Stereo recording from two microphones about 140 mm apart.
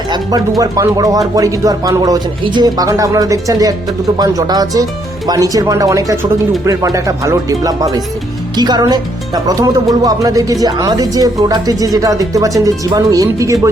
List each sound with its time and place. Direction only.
0.1 s music: 25° right (ahead or behind)
0.6 s a woman's voice: 25° right (ahead or behind)